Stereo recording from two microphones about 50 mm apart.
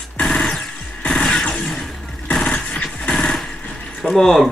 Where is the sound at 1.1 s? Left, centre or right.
Centre.